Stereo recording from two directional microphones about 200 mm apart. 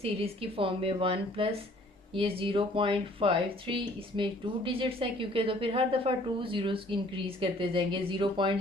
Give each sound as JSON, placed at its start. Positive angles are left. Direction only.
{"t": 0.0, "sound": "speech", "side_deg": -30}